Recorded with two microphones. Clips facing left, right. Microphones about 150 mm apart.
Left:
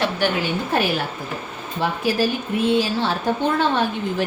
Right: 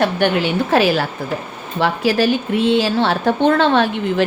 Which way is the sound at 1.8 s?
80° right.